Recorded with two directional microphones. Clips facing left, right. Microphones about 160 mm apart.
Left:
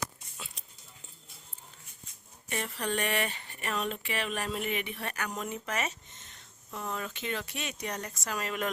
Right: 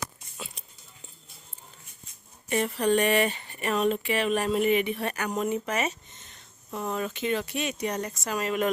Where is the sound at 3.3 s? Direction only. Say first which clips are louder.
Right 7 dB; 20° right (ahead or behind).